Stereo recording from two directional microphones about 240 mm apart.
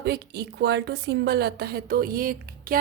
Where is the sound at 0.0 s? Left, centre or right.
Right.